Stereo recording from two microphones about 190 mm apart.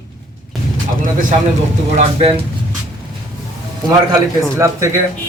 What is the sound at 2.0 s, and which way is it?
Speech, 30° right (ahead or behind).